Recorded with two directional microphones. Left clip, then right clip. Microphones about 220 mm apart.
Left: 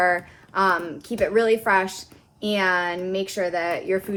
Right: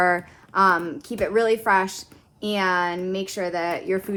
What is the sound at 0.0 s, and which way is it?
A woman's voice, 25° right (ahead or behind).